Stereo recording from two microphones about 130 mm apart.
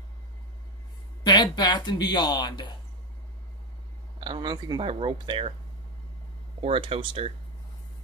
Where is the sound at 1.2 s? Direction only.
35° left (ahead or behind).